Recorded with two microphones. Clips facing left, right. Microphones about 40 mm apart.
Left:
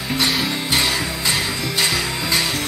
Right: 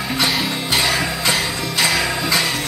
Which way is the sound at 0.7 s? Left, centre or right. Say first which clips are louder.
Right 3 dB; centre.